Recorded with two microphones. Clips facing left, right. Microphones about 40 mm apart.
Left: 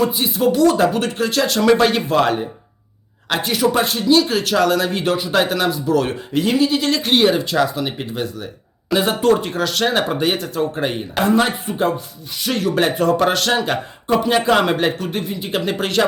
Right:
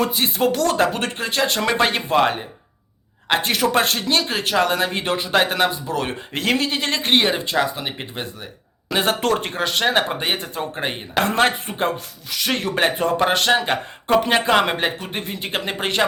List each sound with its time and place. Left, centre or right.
0.0 s speech: right
1.2 s speech: right
3.4 s speech: right
4.3 s speech: right
6.3 s speech: right
6.7 s speech: right
9.0 s speech: right
9.5 s speech: right
11.2 s speech: right
12.5 s speech: right; by 15.1 s centre
15.2 s speech: right
15.5 s speech: right